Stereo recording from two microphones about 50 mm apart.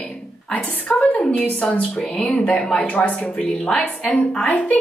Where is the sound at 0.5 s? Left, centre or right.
Left.